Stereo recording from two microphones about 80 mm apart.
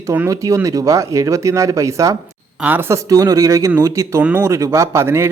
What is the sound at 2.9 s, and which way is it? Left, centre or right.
Speech, right.